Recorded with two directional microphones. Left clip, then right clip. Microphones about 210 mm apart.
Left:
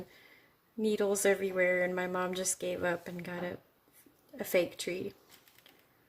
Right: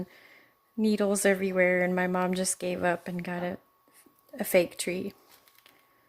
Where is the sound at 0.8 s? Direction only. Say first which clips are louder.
Right 3 dB; 35° right (ahead or behind).